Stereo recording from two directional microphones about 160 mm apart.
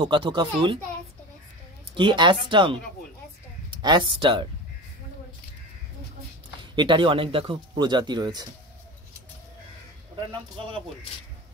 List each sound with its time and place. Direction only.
0.0 s speech: 30° right (ahead or behind)
2.0 s speech: 30° right (ahead or behind)
3.8 s speech: 30° right (ahead or behind)
6.6 s speech: 30° right (ahead or behind)